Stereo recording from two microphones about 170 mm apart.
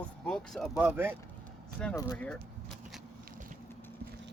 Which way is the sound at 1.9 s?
20° left (ahead or behind).